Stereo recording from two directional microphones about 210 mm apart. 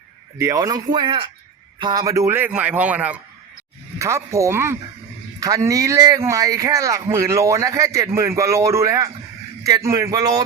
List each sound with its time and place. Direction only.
0.3 s speech: 15° right (ahead or behind)